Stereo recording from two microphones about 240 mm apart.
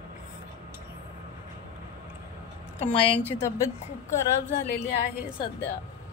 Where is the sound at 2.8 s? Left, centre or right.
Left.